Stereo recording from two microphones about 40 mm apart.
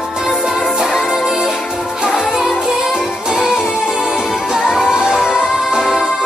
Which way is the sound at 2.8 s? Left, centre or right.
Centre.